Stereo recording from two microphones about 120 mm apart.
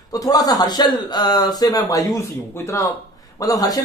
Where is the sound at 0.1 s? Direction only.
30° left (ahead or behind).